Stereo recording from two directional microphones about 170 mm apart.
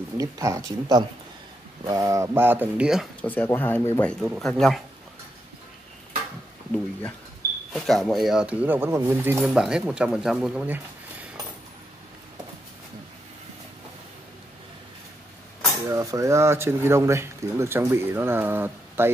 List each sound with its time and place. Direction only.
0.2 s speech: 20° right (ahead or behind); by 3.3 s centre (ahead or behind)
3.3 s speech: 10° left (ahead or behind)
7.7 s speech: centre (ahead or behind)
9.5 s speech: 5° right (ahead or behind)
15.9 s speech: 20° right (ahead or behind)